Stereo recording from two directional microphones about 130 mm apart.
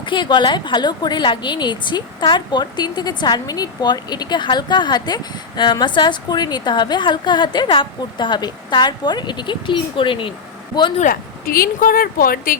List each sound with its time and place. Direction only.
0.0 s a woman's voice: 35° left (ahead or behind)
10.9 s speech: 80° left